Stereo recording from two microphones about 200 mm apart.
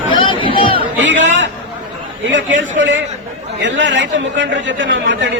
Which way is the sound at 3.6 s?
65° right (ahead or behind).